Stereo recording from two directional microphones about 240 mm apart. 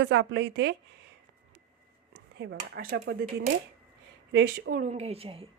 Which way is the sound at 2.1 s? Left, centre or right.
Right.